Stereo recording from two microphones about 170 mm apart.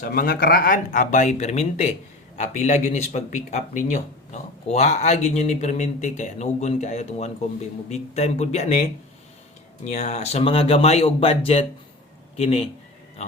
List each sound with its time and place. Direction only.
0.0 s speech: 60° left (ahead or behind); by 8.8 s 40° left (ahead or behind)
9.8 s speech: 45° left (ahead or behind)